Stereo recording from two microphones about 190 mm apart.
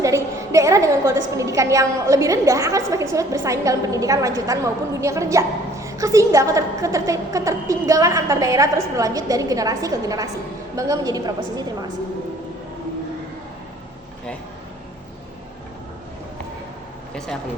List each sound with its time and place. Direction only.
0.0 s a woman's voice: 15° right (ahead or behind)